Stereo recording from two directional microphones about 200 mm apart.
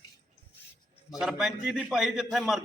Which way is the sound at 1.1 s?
Centre (ahead or behind).